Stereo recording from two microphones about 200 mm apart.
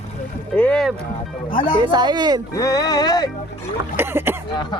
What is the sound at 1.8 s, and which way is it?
Speech, 20° right (ahead or behind).